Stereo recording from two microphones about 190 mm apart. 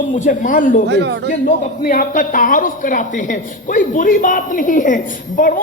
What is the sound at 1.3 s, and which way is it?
A man's voice, 45° left (ahead or behind).